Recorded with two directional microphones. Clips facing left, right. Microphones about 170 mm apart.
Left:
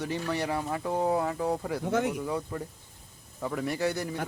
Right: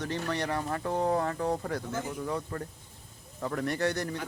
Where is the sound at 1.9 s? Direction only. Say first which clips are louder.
Left 7 dB; 75° left (ahead or behind).